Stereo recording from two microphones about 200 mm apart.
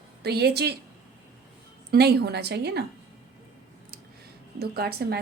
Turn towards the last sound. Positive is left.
turn(degrees=-50)  # may be behind; listen again after turning